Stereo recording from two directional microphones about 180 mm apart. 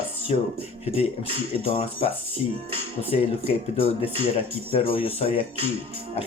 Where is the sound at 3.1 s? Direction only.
35° left (ahead or behind).